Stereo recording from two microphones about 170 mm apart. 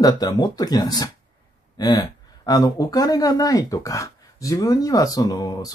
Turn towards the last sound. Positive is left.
turn(degrees=25)  # may be behind; listen again after turning